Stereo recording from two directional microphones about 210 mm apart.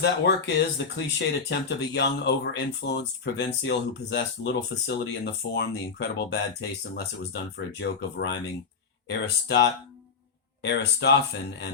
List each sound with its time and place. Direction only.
0.0 s speech: 55° left (ahead or behind)
10.6 s speech: 55° left (ahead or behind)